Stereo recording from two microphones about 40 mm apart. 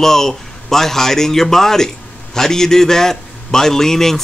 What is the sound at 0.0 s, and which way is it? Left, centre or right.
Speech, centre.